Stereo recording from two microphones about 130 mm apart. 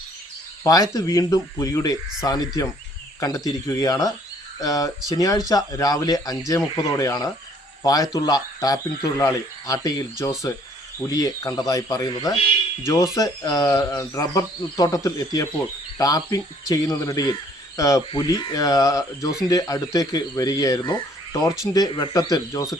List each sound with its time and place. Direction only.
0.6 s speech: 25° left (ahead or behind)